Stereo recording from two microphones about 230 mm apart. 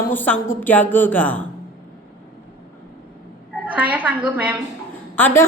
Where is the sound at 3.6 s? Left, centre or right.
Centre.